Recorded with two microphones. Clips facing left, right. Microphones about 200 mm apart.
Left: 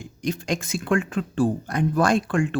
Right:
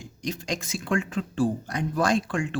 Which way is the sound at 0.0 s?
55° left (ahead or behind).